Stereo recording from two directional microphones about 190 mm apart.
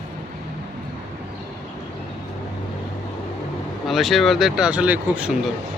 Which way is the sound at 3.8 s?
Centre (ahead or behind).